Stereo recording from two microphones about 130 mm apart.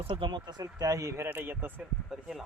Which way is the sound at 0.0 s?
40° right (ahead or behind).